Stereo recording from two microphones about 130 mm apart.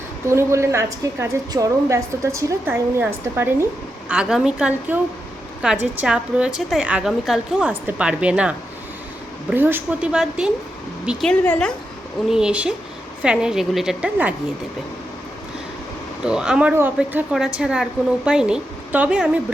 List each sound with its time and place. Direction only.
0.3 s a woman's voice: 20° right (ahead or behind)
4.1 s a woman's voice: 5° right (ahead or behind)
11.3 s speech: 5° left (ahead or behind)
12.3 s a woman's voice: 5° right (ahead or behind)
16.2 s a woman's voice: 5° right (ahead or behind)